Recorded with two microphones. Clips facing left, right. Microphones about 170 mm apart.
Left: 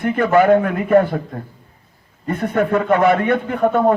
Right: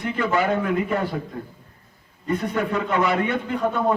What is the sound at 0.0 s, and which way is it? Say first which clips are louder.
A man's voice: left 8 dB; 55° left (ahead or behind).